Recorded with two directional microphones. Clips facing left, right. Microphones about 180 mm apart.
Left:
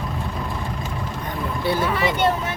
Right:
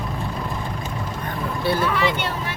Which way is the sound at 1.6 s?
15° left (ahead or behind).